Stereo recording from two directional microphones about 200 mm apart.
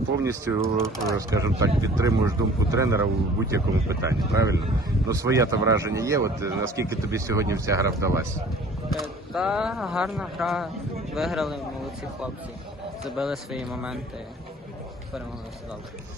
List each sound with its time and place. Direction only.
0.2 s speech: 15° right (ahead or behind)
8.9 s speech: centre (ahead or behind)
13.1 s speech: centre (ahead or behind)